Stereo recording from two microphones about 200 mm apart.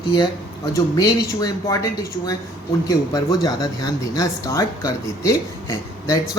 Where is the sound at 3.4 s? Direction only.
20° left (ahead or behind).